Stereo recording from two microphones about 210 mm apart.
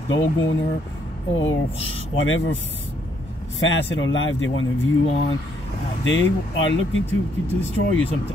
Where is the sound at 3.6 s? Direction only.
65° left (ahead or behind).